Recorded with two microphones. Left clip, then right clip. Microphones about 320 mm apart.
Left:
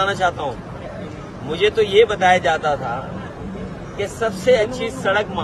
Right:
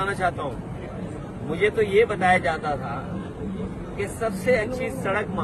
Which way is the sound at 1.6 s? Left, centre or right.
Centre.